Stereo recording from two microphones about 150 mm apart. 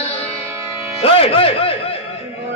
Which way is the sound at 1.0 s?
40° left (ahead or behind).